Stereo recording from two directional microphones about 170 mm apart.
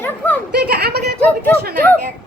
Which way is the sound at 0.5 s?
70° right (ahead or behind).